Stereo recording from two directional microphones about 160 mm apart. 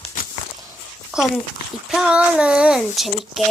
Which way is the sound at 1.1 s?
5° right (ahead or behind).